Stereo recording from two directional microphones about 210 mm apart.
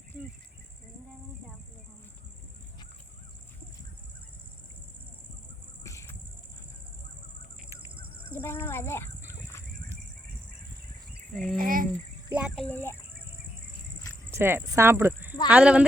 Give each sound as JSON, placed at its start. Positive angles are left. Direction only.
{"t": 5.8, "sound": "insect", "side_deg": 15}
{"t": 8.3, "sound": "a sound", "side_deg": 10}
{"t": 11.3, "sound": "speech", "side_deg": -40}
{"t": 12.3, "sound": "speech", "side_deg": -5}
{"t": 12.6, "sound": "speech", "side_deg": 10}
{"t": 14.3, "sound": "speech", "side_deg": -10}